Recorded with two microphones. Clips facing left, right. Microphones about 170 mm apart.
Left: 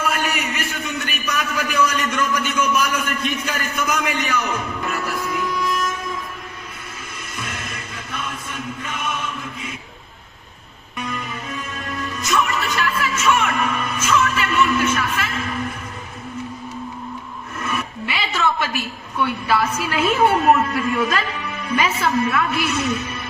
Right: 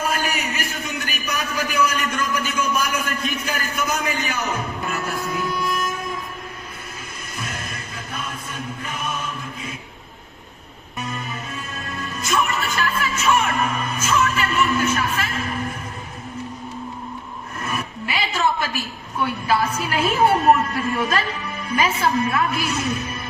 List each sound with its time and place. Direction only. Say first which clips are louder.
0.0 s a sound: left 1 dB; 35° right (ahead or behind)
2.0 s a man's voice: left 2 dB; 30° right (ahead or behind)
7.3 s music: even; 35° right (ahead or behind)
12.2 s music: left 1 dB; 35° right (ahead or behind)
17.6 s a sound: left 2 dB; 35° right (ahead or behind)
19.2 s a woman's voice: left 1 dB; 35° right (ahead or behind)